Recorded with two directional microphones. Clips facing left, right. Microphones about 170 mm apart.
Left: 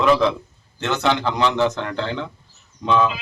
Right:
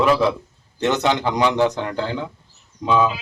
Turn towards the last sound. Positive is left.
turn(degrees=-10)  # may be behind; listen again after turning